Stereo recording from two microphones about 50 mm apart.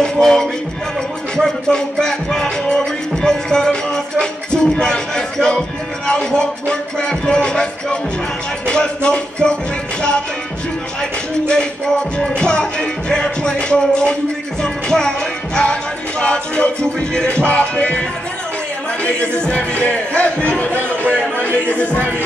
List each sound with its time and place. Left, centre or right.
0.0 s music: centre
11.0 s music: centre
19.0 s music: left
21.4 s speech: left